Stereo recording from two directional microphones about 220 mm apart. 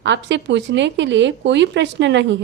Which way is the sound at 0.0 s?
55° right (ahead or behind).